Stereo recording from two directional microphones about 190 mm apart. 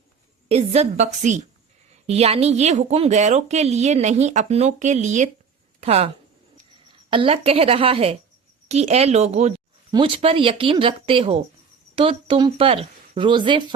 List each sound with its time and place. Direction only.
0.4 s a woman's voice: 35° right (ahead or behind)
7.1 s a woman's voice: 30° right (ahead or behind)